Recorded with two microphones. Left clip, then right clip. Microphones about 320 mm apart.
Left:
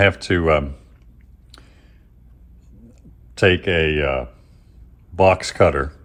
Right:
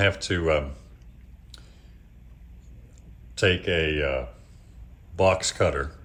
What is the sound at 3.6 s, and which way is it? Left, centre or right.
Speech, left.